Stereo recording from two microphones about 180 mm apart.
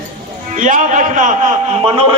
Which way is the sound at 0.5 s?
45° right (ahead or behind).